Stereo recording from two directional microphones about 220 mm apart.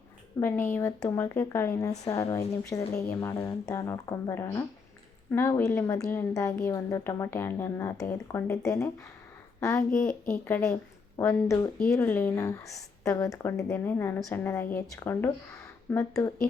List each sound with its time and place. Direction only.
0.3 s a woman's voice: 10° left (ahead or behind)